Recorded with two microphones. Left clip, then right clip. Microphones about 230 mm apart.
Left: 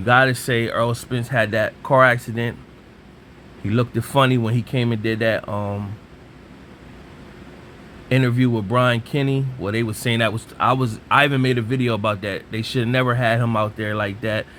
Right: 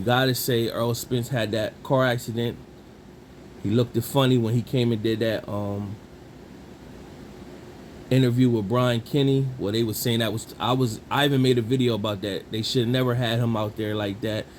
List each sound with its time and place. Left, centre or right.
0.0 s speech: left
3.7 s speech: left
8.1 s speech: left